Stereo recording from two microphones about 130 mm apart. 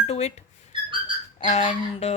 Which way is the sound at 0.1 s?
55° left (ahead or behind).